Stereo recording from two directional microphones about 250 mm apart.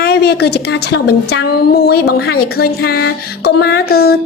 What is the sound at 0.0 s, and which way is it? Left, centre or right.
Speech, left.